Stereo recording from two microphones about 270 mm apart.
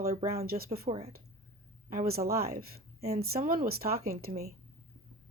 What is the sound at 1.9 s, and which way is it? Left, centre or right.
Speech, right.